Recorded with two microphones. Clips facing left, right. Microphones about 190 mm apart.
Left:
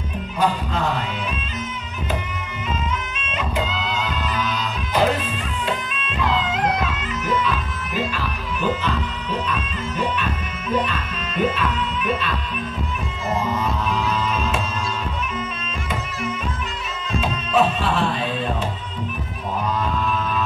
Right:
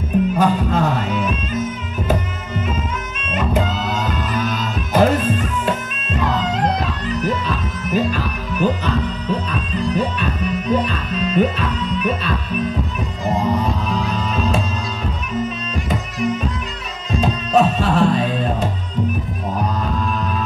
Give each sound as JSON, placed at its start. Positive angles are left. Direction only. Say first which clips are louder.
{"t": 0.4, "sound": "music", "louder": "right 5 dB", "side_deg": -50}
{"t": 3.3, "sound": "music", "louder": "right 6 dB", "side_deg": -50}
{"t": 13.4, "sound": "music", "louder": "right 4 dB", "side_deg": -35}
{"t": 17.2, "sound": "music", "louder": "right 4 dB", "side_deg": -40}